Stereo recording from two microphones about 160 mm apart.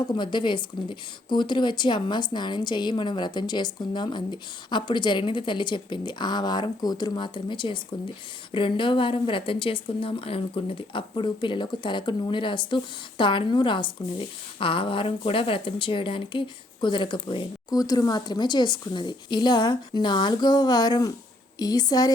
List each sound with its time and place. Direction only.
0.1 s speech: 30° left (ahead or behind)